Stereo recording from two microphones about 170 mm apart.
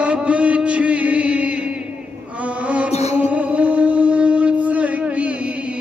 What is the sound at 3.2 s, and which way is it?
Music, 10° right (ahead or behind).